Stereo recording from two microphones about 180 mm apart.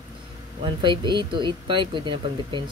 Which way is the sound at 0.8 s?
25° right (ahead or behind).